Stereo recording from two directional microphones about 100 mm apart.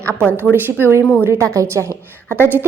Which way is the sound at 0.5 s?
20° right (ahead or behind).